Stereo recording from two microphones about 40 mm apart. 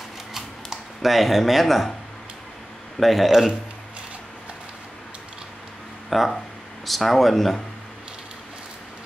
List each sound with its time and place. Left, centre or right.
0.3 s a sound: centre
3.0 s speech: centre
6.0 s speech: centre